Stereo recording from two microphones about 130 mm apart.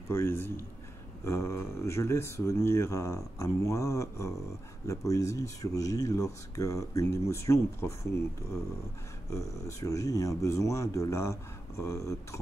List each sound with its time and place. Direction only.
0.1 s speech: 20° left (ahead or behind)
9.3 s speech: 25° left (ahead or behind)